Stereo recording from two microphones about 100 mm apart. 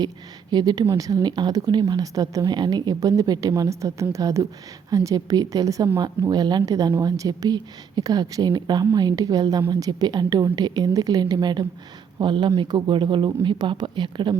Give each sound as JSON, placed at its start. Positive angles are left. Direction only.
{"t": 0.5, "sound": "speech", "side_deg": -40}